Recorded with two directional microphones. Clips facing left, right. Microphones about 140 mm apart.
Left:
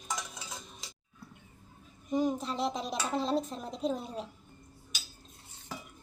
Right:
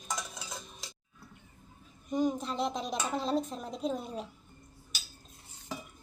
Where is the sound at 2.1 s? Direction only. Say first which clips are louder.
Even; centre (ahead or behind).